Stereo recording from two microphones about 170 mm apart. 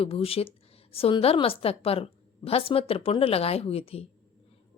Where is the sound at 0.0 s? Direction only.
35° left (ahead or behind).